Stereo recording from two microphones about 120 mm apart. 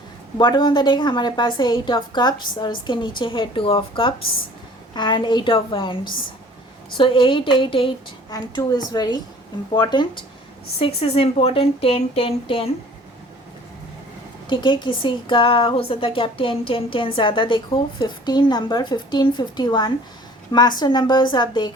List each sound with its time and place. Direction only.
0.3 s a woman's voice: 35° left (ahead or behind)
8.3 s a woman's voice: 35° left (ahead or behind)
10.8 s a woman's voice: 55° left (ahead or behind)
14.4 s a woman's voice: 40° left (ahead or behind)